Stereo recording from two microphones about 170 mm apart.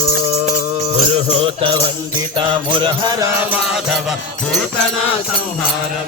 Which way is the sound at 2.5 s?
30° right (ahead or behind).